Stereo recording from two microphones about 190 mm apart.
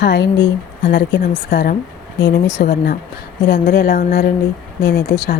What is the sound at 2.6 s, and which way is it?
Speech, 50° left (ahead or behind).